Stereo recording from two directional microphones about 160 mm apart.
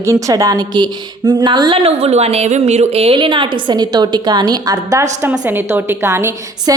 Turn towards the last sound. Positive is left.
turn(degrees=-20)  # may be behind; listen again after turning